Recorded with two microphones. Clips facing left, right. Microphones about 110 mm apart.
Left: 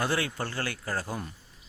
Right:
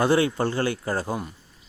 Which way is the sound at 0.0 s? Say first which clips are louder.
Right 9 dB; 25° right (ahead or behind).